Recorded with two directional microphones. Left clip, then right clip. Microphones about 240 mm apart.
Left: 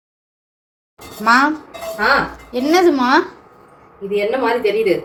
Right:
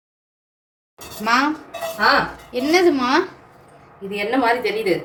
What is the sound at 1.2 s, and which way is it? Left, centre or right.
Speech, centre.